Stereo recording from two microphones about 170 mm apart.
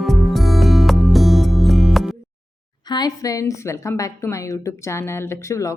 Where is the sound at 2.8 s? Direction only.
25° left (ahead or behind).